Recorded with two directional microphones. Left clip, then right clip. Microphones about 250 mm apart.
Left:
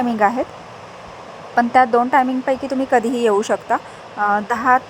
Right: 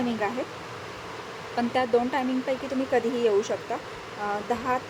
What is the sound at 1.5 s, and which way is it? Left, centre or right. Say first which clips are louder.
Speech: left 11 dB; left.